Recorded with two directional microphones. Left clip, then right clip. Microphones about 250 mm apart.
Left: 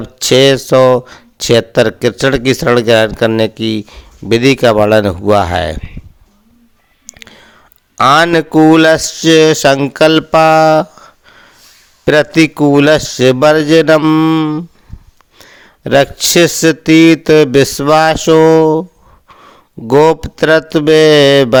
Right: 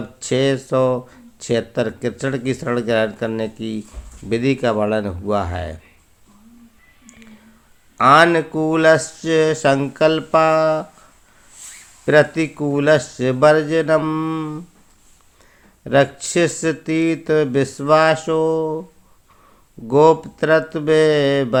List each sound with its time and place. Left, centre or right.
0.2 s speech: left
7.1 s whispering: left
7.9 s speech: left
12.0 s speech: left